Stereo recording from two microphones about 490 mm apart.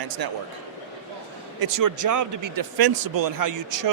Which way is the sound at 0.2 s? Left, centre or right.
Right.